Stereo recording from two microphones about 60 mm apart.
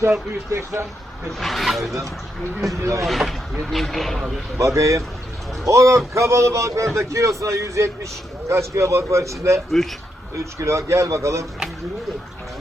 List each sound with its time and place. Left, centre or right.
0.5 s speech: right
1.4 s speech: centre
2.6 s speech: right
3.1 s speech: centre
4.5 s speech: right